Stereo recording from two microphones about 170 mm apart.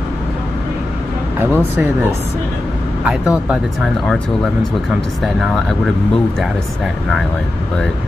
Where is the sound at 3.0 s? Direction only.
5° right (ahead or behind).